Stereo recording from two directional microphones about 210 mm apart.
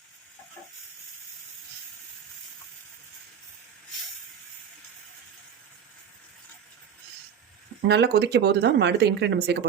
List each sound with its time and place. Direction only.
7.9 s speech: 50° right (ahead or behind)